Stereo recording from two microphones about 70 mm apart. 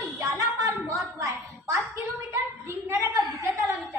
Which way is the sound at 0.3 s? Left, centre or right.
Right.